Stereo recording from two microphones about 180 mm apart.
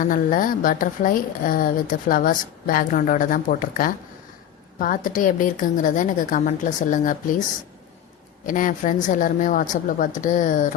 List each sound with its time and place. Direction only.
0.0 s a woman's voice: 50° left (ahead or behind)
8.4 s a woman's voice: 45° left (ahead or behind)